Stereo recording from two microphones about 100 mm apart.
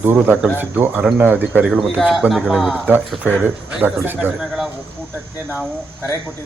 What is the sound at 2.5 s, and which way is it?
Speech, centre (ahead or behind).